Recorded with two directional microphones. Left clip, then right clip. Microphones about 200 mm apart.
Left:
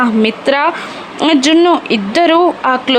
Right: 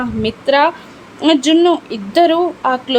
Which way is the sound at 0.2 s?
15° left (ahead or behind).